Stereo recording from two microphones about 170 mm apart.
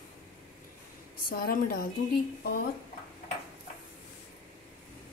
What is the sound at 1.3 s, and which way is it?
Speech, 60° left (ahead or behind).